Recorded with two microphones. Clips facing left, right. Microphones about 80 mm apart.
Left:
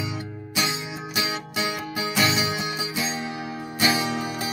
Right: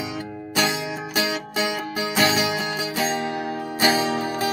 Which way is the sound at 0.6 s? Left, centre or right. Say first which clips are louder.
Right 4 dB; right.